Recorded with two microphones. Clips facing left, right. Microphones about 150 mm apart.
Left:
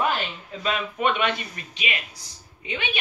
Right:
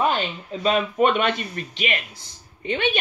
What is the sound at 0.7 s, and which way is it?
A man's voice, 40° right (ahead or behind).